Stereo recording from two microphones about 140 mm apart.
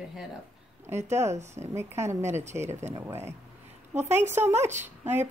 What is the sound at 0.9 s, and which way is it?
Speech, 55° right (ahead or behind).